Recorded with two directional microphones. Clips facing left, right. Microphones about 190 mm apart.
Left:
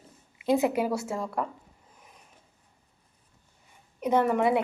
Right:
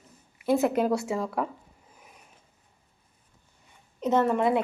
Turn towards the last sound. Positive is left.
turn(degrees=15)  # may be behind; listen again after turning